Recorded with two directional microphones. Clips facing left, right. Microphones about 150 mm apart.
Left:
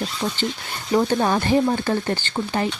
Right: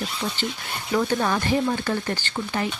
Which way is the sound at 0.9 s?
25° left (ahead or behind).